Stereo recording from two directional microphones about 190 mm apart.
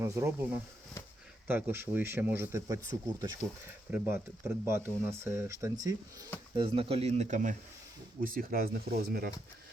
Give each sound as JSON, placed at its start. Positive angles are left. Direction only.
{"t": 0.0, "sound": "speech", "side_deg": -10}
{"t": 6.6, "sound": "speech", "side_deg": -30}